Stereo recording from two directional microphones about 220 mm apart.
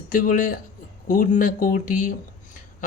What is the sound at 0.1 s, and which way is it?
Speech, 35° left (ahead or behind).